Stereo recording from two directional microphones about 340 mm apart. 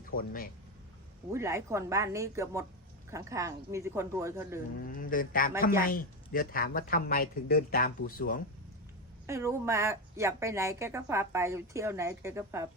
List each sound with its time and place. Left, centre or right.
0.1 s speech: left
1.3 s a woman's voice: centre
4.9 s speech: left
9.2 s a woman's voice: centre